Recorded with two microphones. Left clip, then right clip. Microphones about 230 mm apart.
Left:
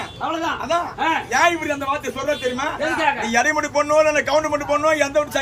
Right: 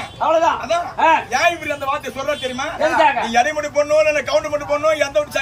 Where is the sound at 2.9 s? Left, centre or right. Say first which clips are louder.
Right 6 dB; centre.